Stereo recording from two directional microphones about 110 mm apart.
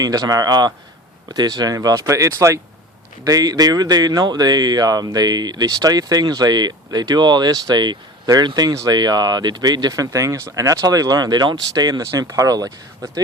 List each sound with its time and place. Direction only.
0.0 s speech: 35° right (ahead or behind)